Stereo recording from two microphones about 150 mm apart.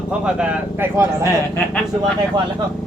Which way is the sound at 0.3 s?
15° right (ahead or behind).